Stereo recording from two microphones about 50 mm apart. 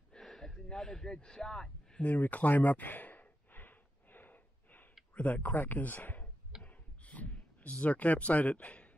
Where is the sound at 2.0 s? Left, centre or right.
Left.